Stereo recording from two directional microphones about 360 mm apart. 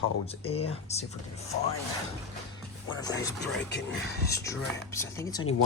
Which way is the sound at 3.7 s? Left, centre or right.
Left.